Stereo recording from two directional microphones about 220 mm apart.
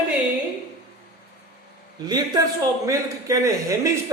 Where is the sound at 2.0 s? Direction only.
20° right (ahead or behind).